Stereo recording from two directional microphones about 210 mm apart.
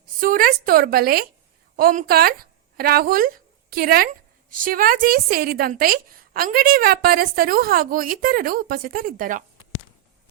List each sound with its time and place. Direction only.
0.2 s a woman's voice: 45° right (ahead or behind)